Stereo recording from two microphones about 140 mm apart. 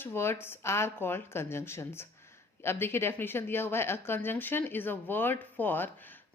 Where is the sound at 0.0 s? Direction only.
15° left (ahead or behind).